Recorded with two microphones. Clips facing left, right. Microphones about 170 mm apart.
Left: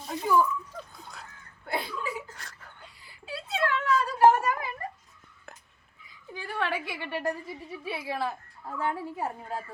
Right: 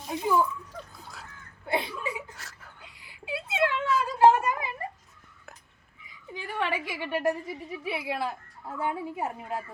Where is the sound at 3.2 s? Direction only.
20° right (ahead or behind).